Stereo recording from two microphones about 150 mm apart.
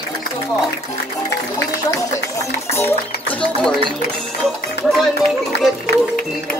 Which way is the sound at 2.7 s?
15° left (ahead or behind).